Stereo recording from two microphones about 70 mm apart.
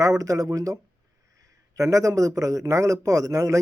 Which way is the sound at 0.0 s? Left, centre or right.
Right.